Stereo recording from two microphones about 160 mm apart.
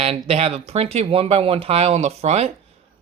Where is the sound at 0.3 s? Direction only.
40° right (ahead or behind).